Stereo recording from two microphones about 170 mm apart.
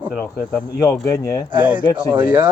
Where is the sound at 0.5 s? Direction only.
20° left (ahead or behind).